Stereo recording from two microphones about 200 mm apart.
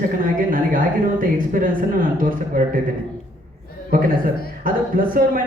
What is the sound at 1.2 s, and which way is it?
Speech, 45° right (ahead or behind).